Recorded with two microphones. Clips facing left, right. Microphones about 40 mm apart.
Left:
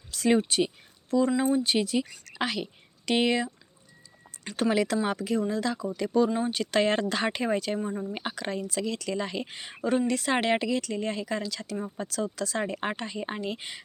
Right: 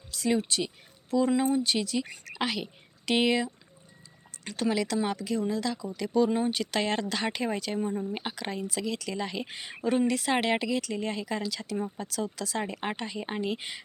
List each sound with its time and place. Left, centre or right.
0.1 s a sound: left
0.4 s speech: left
1.4 s speech: centre
1.7 s speech: left
2.4 s speech: centre
4.5 s speech: left; by 13.8 s centre